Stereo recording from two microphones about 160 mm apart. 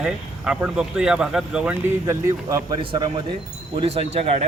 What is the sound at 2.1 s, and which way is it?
A man's voice, 20° right (ahead or behind).